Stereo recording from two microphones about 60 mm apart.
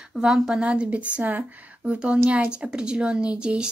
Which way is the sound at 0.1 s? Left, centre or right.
Centre.